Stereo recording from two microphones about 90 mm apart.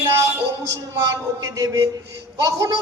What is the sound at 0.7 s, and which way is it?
A man's voice, 40° right (ahead or behind).